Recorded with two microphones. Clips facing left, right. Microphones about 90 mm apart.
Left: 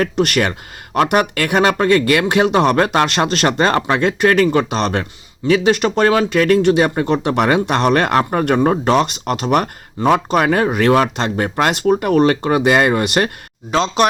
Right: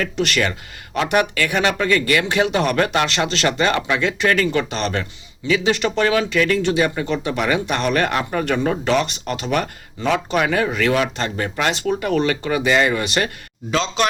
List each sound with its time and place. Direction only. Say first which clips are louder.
0.0 s speech: left 4 dB; 55° left (ahead or behind)
2.7 s speech: left 4 dB; 45° left (ahead or behind)
8.9 s speech: left 4 dB; 60° left (ahead or behind); by 14.1 s 45° left (ahead or behind)